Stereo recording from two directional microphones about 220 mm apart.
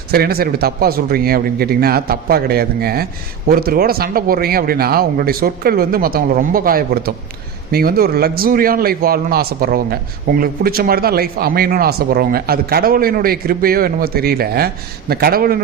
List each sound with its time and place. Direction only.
0.1 s a man's voice: 45° right (ahead or behind)